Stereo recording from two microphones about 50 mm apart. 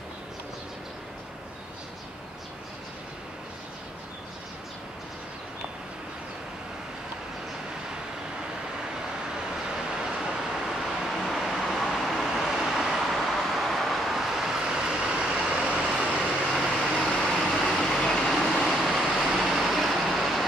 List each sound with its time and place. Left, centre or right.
10.2 s vehicle: centre
17.2 s vehicle: centre